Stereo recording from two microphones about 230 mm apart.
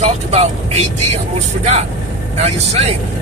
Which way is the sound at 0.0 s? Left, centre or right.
Right.